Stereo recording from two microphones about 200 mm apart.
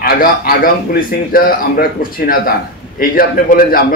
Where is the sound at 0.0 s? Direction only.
50° left (ahead or behind).